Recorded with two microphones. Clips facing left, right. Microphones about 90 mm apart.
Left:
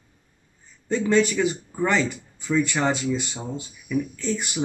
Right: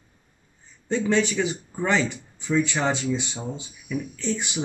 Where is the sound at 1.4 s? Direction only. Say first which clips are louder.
Left 3 dB; 5° right (ahead or behind).